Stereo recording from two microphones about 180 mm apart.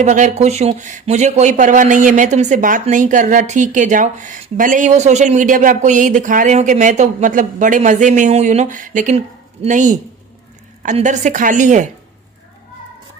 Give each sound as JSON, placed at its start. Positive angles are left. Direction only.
{"t": 0.0, "sound": "speech", "side_deg": -40}